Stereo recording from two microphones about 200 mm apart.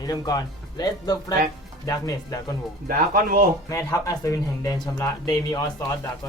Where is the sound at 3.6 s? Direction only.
15° left (ahead or behind).